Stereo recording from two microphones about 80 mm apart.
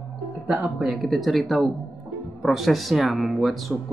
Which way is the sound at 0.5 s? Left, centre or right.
Centre.